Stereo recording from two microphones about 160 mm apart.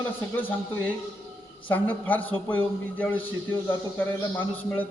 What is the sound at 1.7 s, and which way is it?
A man's voice, 10° left (ahead or behind).